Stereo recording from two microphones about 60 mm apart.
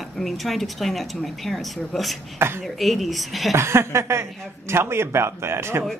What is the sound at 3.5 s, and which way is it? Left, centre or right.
Speech, right.